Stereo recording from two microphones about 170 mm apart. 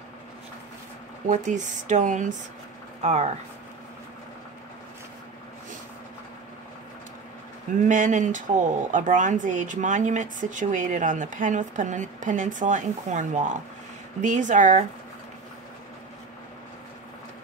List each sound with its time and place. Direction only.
1.3 s speech: 45° right (ahead or behind)
7.9 s speech: 45° right (ahead or behind)